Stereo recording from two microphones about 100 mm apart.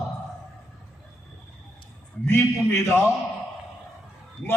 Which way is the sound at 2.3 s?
25° left (ahead or behind).